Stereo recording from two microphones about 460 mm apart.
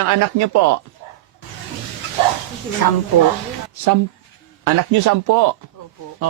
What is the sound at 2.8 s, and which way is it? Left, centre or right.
Speech, left.